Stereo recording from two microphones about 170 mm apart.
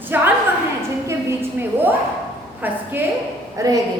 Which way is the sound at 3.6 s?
20° right (ahead or behind).